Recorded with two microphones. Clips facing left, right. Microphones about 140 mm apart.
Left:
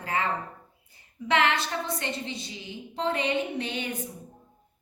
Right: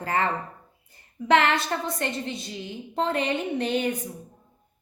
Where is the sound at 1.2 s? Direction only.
55° right (ahead or behind).